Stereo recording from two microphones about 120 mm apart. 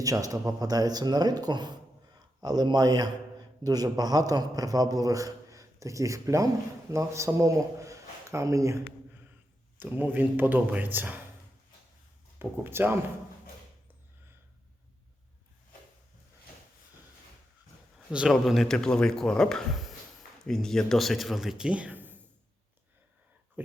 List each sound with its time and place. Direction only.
0.0 s a man's voice: 30° right (ahead or behind)
12.4 s speech: 20° right (ahead or behind)
18.1 s speech: 5° right (ahead or behind)
23.6 s a sound: 15° right (ahead or behind)